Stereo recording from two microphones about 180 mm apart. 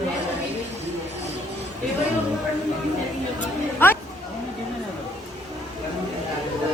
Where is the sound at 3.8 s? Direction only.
10° left (ahead or behind).